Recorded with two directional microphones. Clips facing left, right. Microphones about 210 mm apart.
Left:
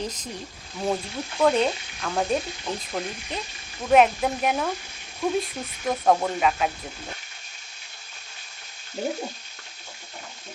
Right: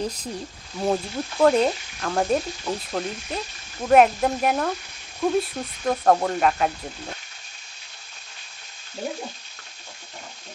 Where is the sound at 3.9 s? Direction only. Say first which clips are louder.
Right 2 dB; centre (ahead or behind).